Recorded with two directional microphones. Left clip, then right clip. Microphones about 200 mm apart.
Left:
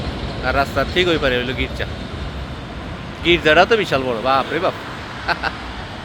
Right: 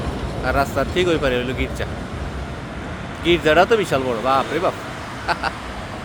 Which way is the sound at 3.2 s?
5° right (ahead or behind).